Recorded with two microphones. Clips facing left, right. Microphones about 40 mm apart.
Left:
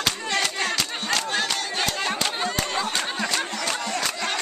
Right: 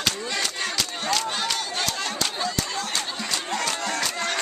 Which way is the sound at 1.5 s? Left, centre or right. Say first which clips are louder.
Left 1 dB; left.